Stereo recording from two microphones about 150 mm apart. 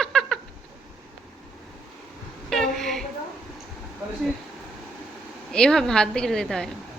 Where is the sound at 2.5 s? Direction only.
Centre (ahead or behind).